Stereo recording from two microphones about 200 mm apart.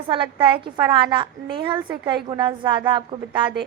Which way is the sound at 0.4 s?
25° right (ahead or behind).